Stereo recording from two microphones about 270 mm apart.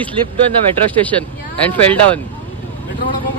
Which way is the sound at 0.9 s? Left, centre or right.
Centre.